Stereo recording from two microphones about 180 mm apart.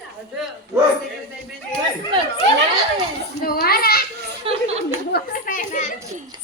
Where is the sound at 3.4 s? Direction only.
55° left (ahead or behind).